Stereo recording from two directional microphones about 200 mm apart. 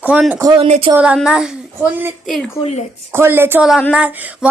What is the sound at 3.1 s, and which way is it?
Speech, 10° right (ahead or behind).